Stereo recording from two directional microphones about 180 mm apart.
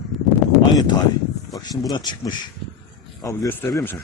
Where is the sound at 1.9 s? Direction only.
25° left (ahead or behind).